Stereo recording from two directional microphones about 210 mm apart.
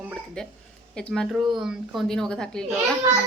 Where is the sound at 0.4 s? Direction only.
5° left (ahead or behind).